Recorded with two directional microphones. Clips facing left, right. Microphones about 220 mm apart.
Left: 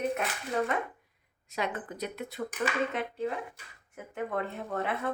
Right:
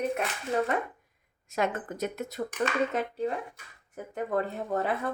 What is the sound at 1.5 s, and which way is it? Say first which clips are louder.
A woman's voice: right 4 dB; 45° right (ahead or behind).